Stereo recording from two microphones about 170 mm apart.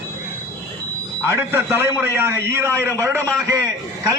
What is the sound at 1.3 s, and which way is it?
A man's voice, 15° right (ahead or behind).